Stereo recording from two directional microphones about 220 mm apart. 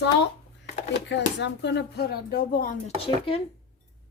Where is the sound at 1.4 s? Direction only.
50° left (ahead or behind).